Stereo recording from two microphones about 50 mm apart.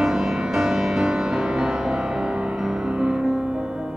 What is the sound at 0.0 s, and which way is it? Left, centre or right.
Music, centre.